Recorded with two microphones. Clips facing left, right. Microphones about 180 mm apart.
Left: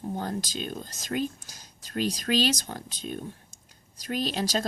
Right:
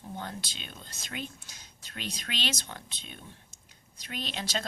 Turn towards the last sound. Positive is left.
turn(degrees=40)  # may be behind; listen again after turning